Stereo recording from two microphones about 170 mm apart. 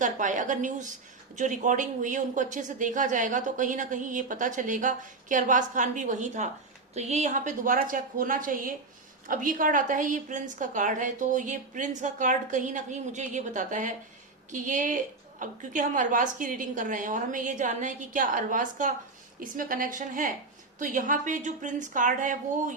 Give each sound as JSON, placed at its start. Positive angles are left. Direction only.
{"t": 0.0, "sound": "a woman's voice", "side_deg": -50}